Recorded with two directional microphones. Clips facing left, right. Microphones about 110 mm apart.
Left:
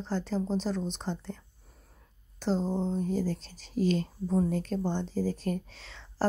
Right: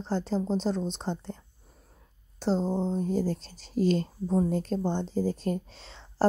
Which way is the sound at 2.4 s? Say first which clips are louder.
Right 2 dB; 30° right (ahead or behind).